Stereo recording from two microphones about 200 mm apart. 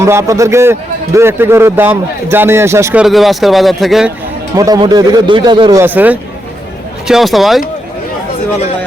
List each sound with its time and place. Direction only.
0.0 s a man's voice: 15° right (ahead or behind)
4.5 s speech: 20° right (ahead or behind)
5.8 s a man's voice: 10° right (ahead or behind)